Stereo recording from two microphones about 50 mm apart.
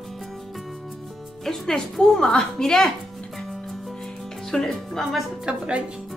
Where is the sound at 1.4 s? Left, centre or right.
Centre.